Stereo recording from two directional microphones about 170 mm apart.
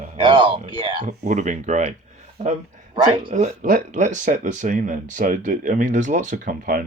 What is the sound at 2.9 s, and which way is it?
Speech, 30° right (ahead or behind).